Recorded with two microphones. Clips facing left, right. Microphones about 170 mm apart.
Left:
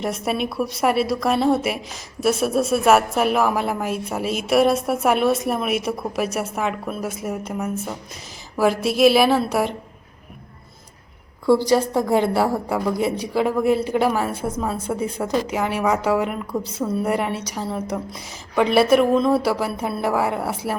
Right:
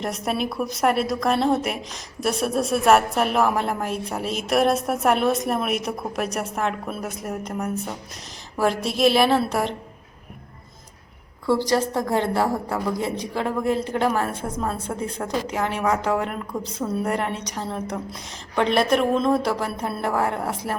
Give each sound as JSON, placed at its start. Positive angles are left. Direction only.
{"t": 0.0, "sound": "a woman's voice", "side_deg": 0}
{"t": 11.4, "sound": "a woman's voice", "side_deg": 10}